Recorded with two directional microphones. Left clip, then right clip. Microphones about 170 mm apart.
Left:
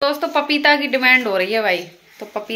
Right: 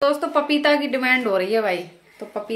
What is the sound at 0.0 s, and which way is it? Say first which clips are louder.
Speech: left 1 dB; 5° right (ahead or behind).